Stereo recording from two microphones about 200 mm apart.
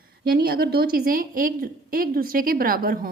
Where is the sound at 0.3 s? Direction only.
50° right (ahead or behind).